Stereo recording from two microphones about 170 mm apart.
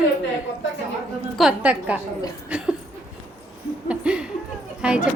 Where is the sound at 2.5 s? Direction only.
5° right (ahead or behind).